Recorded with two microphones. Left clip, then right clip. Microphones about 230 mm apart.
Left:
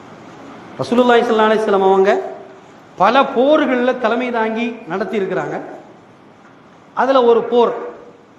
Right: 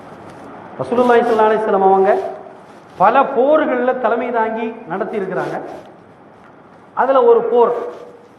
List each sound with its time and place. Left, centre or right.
0.8 s a man's voice: left
6.9 s a man's voice: left